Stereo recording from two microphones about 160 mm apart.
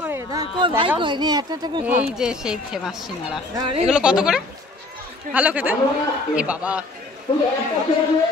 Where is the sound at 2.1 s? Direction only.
5° right (ahead or behind).